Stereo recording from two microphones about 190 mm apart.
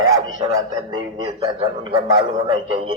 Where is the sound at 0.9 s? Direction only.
25° right (ahead or behind).